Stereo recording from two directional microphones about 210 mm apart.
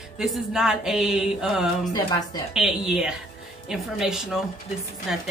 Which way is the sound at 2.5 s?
Centre (ahead or behind).